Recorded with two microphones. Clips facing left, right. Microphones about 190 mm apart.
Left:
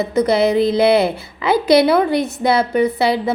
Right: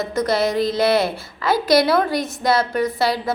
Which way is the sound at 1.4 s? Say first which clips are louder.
Left 4 dB; 15° left (ahead or behind).